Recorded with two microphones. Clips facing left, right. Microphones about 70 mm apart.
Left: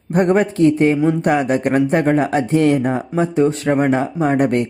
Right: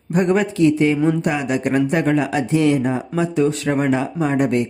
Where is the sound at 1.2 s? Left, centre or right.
Left.